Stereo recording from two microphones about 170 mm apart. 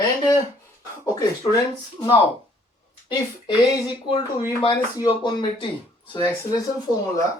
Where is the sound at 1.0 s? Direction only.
20° left (ahead or behind).